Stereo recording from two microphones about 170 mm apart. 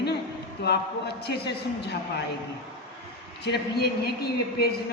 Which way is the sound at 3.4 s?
70° left (ahead or behind).